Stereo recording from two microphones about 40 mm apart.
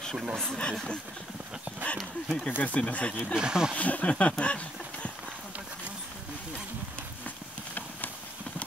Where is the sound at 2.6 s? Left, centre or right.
Left.